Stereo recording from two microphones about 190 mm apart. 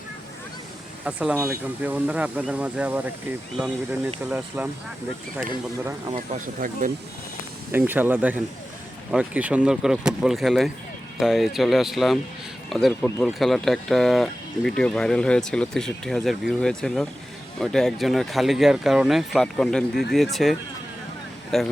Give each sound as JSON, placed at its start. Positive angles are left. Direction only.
{"t": 1.0, "sound": "speech", "side_deg": -10}
{"t": 4.3, "sound": "speech", "side_deg": -10}
{"t": 6.1, "sound": "speech", "side_deg": -40}
{"t": 7.7, "sound": "speech", "side_deg": -10}
{"t": 12.9, "sound": "speech", "side_deg": 15}